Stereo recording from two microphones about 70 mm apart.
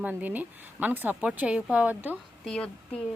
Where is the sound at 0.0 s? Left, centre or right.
Right.